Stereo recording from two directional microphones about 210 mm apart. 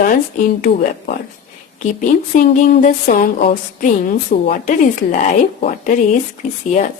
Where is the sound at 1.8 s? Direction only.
35° left (ahead or behind).